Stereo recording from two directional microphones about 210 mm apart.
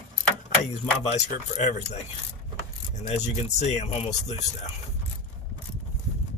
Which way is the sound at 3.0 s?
35° left (ahead or behind).